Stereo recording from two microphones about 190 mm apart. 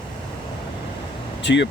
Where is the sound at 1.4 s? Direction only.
65° left (ahead or behind).